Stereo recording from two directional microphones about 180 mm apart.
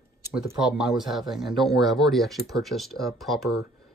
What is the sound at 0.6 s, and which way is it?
Speech, centre (ahead or behind).